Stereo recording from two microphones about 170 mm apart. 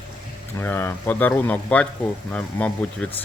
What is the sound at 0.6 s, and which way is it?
A man's voice, 15° left (ahead or behind).